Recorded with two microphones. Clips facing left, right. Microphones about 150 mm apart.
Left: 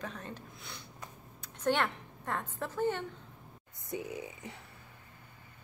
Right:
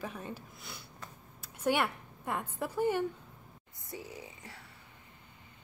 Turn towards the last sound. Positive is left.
turn(degrees=20)  # may be behind; listen again after turning